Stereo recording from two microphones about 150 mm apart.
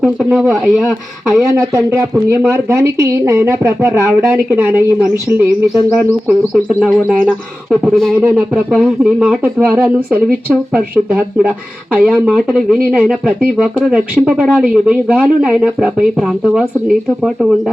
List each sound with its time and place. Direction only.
0.0 s speech: 5° right (ahead or behind)
1.5 s speech: 20° right (ahead or behind); by 8.1 s centre (ahead or behind)
8.2 s speech: 15° right (ahead or behind)
8.7 s speech: centre (ahead or behind)